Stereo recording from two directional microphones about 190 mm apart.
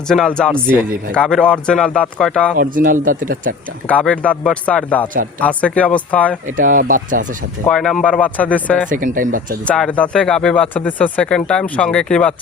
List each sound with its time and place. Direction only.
0.1 s speech: 5° left (ahead or behind)
0.5 s speech: 10° right (ahead or behind)
1.1 s speech: 5° left (ahead or behind)
2.6 s speech: 45° right (ahead or behind)
3.8 s speech: 5° left (ahead or behind)
6.6 s speech: 45° right (ahead or behind)
7.7 s speech: 5° left (ahead or behind)
8.9 s speech: 45° right (ahead or behind)
9.6 s speech: 5° left (ahead or behind)